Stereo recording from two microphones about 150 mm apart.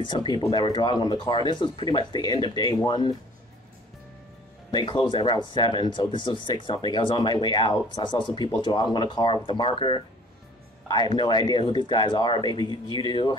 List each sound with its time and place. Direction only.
0.0 s speech: 30° left (ahead or behind)
4.6 s speech: 30° left (ahead or behind)